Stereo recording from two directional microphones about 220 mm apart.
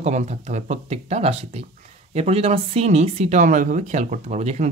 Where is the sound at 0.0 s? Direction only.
30° right (ahead or behind).